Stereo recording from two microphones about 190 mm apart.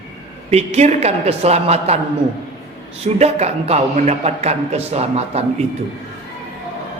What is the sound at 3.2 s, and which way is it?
A man's voice, 35° right (ahead or behind).